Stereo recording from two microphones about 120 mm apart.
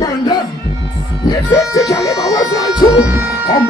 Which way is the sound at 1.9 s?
30° left (ahead or behind).